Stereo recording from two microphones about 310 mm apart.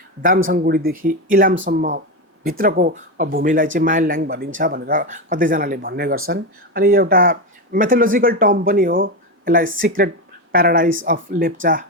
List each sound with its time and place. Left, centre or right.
0.4 s speech: right